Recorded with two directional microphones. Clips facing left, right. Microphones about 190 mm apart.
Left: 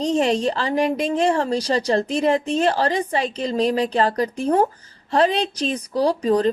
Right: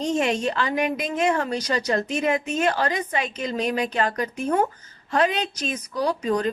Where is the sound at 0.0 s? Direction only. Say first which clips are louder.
Left 4 dB; 35° left (ahead or behind).